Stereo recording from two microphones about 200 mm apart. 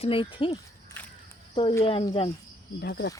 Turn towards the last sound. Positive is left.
turn(degrees=50)  # may be behind; listen again after turning